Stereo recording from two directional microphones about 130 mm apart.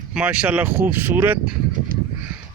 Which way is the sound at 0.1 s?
10° right (ahead or behind).